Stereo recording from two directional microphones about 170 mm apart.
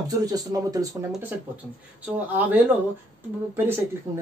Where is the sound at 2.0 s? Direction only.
10° right (ahead or behind).